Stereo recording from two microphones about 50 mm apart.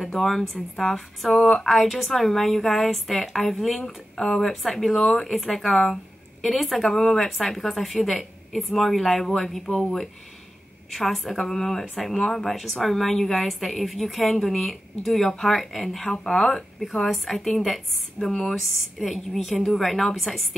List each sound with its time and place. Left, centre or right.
0.0 s speech: centre
10.9 s speech: centre
17.1 s speech: centre